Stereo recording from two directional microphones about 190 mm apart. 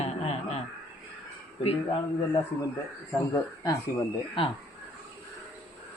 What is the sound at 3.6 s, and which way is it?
Speech, 25° left (ahead or behind).